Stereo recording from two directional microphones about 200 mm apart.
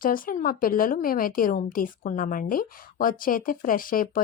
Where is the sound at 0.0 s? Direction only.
45° left (ahead or behind).